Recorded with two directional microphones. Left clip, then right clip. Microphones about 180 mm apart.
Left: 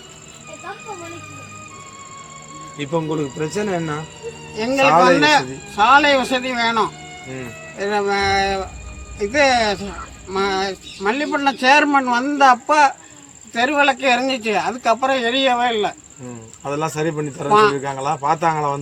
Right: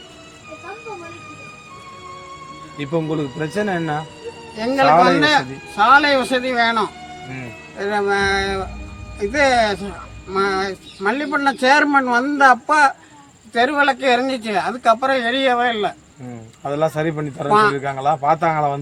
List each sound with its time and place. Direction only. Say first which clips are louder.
2.7 s speech: even; 50° right (ahead or behind)
4.5 s speech: right 1 dB; 15° right (ahead or behind)
16.6 s speech: right 2 dB; 45° right (ahead or behind)
17.5 s speech: left 1 dB; 20° right (ahead or behind)
17.7 s speech: right 3 dB; 45° right (ahead or behind)